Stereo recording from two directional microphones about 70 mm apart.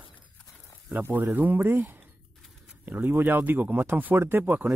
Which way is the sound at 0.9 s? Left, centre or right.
Right.